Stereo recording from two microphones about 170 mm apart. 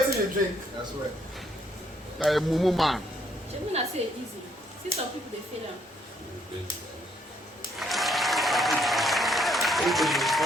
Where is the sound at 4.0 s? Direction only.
35° right (ahead or behind).